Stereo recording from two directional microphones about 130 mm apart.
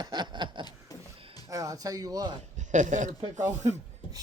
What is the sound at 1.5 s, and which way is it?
Speech, 25° right (ahead or behind).